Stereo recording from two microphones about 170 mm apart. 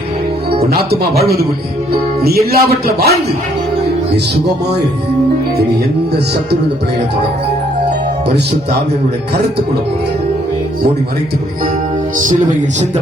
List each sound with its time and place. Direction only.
2.2 s speech: 65° right (ahead or behind)
12.1 s music: 50° right (ahead or behind)